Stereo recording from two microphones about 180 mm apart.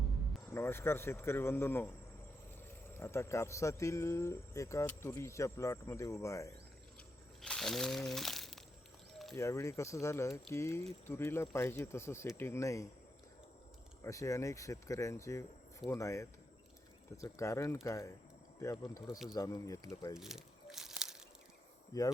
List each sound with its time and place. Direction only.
0.5 s speech: 15° left (ahead or behind)
2.9 s speech: 15° left (ahead or behind)
7.4 s speech: 5° left (ahead or behind)
9.3 s speech: 15° left (ahead or behind)
14.0 s speech: 15° left (ahead or behind)
20.1 s crumpling: centre (ahead or behind)